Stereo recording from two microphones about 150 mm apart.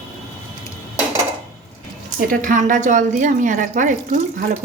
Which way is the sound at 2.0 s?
65° right (ahead or behind).